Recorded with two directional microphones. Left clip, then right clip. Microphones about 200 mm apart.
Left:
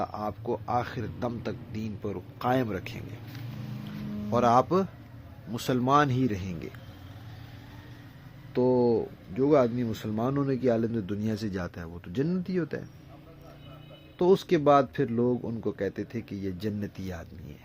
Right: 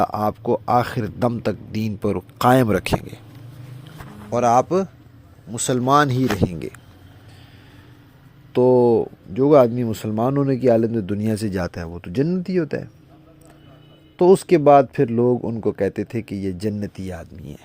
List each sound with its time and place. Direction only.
0.0 s speech: 55° right (ahead or behind)
4.3 s speech: 15° right (ahead or behind); by 6.7 s 45° right (ahead or behind)
8.5 s speech: 50° right (ahead or behind)
14.2 s speech: 40° right (ahead or behind)